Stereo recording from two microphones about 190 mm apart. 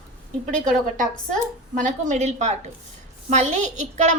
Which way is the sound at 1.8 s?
40° right (ahead or behind).